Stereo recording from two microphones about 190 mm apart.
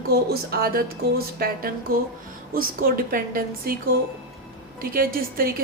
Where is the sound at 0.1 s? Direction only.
55° right (ahead or behind).